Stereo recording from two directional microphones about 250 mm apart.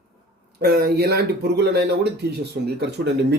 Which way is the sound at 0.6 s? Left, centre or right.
Right.